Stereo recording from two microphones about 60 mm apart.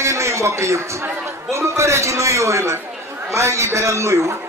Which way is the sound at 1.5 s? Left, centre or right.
Right.